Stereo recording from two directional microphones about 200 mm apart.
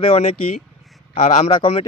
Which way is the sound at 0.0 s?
30° left (ahead or behind).